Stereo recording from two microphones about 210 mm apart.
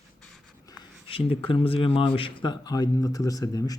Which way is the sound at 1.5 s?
25° left (ahead or behind).